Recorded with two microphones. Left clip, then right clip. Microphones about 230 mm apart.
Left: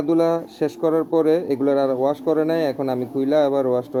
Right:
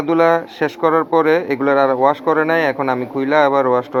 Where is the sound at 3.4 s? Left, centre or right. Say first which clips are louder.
Right 5 dB; right.